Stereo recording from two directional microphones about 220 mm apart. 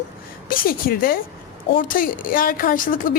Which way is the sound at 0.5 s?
40° left (ahead or behind).